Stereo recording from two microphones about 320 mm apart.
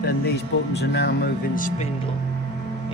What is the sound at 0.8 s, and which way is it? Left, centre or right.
Speech, left.